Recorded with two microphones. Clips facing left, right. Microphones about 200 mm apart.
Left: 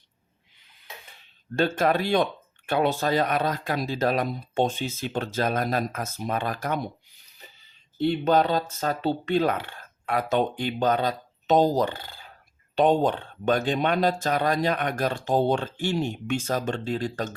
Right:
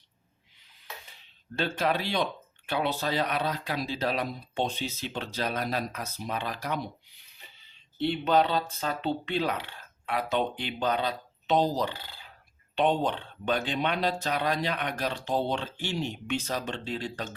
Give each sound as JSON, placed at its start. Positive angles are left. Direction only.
{"t": 1.1, "sound": "speech", "side_deg": 50}